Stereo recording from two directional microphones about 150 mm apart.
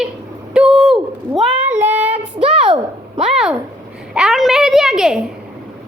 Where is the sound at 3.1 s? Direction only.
5° right (ahead or behind).